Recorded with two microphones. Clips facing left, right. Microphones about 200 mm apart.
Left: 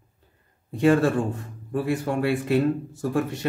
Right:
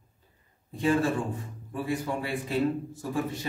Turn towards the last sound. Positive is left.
turn(degrees=70)  # may be behind; listen again after turning